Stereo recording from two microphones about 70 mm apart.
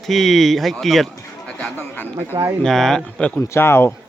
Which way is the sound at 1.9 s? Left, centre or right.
Left.